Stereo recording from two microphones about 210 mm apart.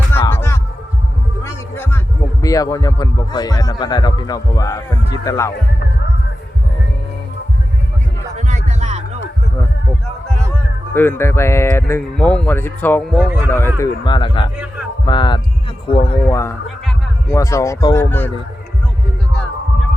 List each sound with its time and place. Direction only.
0.3 s music: 10° left (ahead or behind)
2.4 s speech: 15° left (ahead or behind)
8.4 s music: 35° right (ahead or behind)
10.9 s speech: 10° left (ahead or behind)
13.5 s speech: 10° left (ahead or behind)
16.2 s speech: 15° left (ahead or behind)
19.3 s heart sounds: 5° left (ahead or behind)